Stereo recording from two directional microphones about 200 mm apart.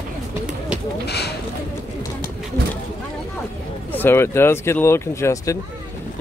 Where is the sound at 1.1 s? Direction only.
55° left (ahead or behind).